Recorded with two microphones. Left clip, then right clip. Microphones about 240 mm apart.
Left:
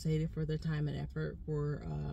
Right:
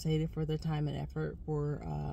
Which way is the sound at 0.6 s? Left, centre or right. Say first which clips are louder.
Right 3 dB; right.